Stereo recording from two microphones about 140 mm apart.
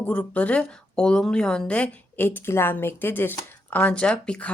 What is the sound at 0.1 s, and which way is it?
A woman's voice, 10° left (ahead or behind).